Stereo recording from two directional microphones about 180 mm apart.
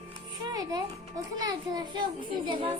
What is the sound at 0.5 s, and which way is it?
A child's voice, 20° right (ahead or behind).